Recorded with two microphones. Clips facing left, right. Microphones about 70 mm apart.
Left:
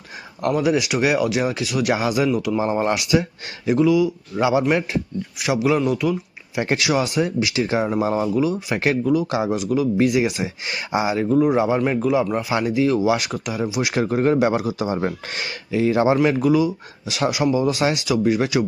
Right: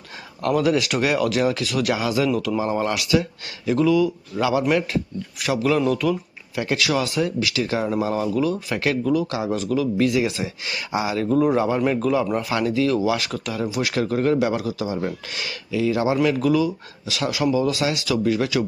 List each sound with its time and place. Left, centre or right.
0.4 s speech: centre
2.6 s speech: left
3.7 s speech: centre
4.4 s speech: left
6.6 s speech: left
8.3 s speech: centre
11.3 s speech: centre
11.5 s speech: centre
14.9 s speech: left
16.4 s speech: centre